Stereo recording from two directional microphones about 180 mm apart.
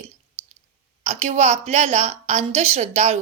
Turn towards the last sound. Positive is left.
turn(degrees=-40)  # may be behind; listen again after turning